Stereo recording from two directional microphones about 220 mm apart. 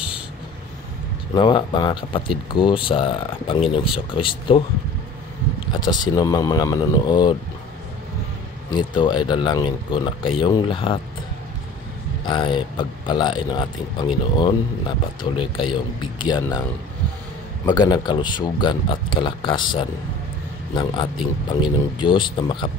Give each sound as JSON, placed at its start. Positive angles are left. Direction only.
{"t": 1.3, "sound": "speech", "side_deg": 20}
{"t": 5.7, "sound": "speech", "side_deg": 20}
{"t": 8.6, "sound": "speech", "side_deg": 20}
{"t": 12.3, "sound": "speech", "side_deg": 20}
{"t": 17.6, "sound": "speech", "side_deg": 20}